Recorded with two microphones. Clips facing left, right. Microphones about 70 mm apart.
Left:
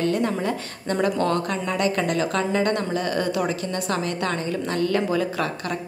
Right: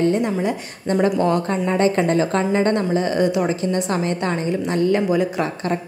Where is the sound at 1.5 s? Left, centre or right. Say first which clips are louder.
Right 5 dB; right.